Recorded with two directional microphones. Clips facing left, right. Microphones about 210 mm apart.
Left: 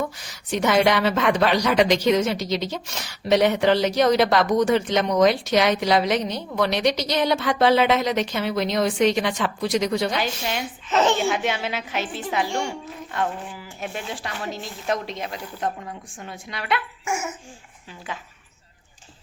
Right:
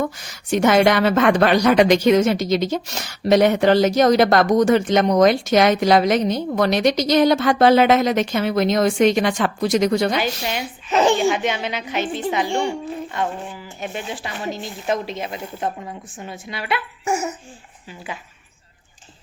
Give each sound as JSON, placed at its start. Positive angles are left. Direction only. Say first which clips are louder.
{"t": 0.5, "sound": "a woman's voice", "louder": "right 4 dB", "side_deg": -50}
{"t": 10.2, "sound": "speech", "louder": "right 3 dB", "side_deg": -5}
{"t": 11.2, "sound": "speech", "louder": "right 4 dB", "side_deg": 0}
{"t": 17.1, "sound": "laughter", "louder": "right 5 dB", "side_deg": -35}